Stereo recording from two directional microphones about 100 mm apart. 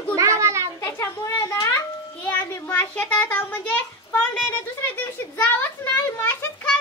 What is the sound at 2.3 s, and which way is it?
A child's voice, 15° left (ahead or behind).